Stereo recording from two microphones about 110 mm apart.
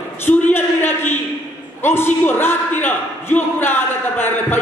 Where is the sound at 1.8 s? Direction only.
20° left (ahead or behind).